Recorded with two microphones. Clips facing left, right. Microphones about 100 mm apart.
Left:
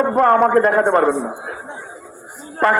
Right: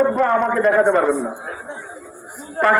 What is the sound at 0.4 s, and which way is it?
Speech, 45° left (ahead or behind).